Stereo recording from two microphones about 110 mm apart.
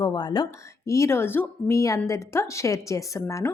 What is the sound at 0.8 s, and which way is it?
Speech, 25° left (ahead or behind).